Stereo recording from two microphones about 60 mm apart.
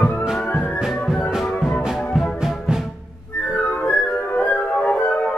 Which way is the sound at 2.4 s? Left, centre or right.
Centre.